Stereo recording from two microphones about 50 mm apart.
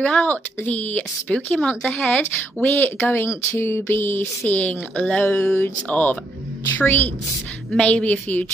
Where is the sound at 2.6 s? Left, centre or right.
Left.